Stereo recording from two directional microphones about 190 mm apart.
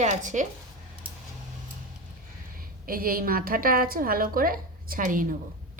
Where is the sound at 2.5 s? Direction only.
50° right (ahead or behind).